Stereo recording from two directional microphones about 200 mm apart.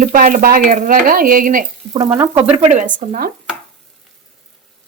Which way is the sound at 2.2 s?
30° right (ahead or behind).